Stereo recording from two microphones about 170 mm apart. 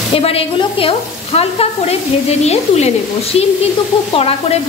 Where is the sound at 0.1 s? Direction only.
35° left (ahead or behind).